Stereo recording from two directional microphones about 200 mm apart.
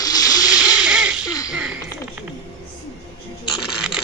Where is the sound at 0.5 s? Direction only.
5° right (ahead or behind).